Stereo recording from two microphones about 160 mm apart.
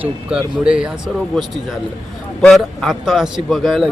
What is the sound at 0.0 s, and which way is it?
Speech, 5° right (ahead or behind).